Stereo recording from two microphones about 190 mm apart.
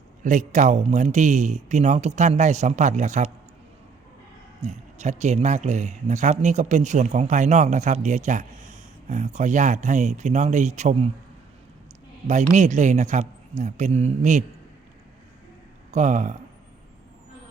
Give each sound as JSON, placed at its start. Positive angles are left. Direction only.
{"t": 0.2, "sound": "speech", "side_deg": -40}
{"t": 4.6, "sound": "speech", "side_deg": -35}
{"t": 12.3, "sound": "speech", "side_deg": -40}
{"t": 15.9, "sound": "speech", "side_deg": -40}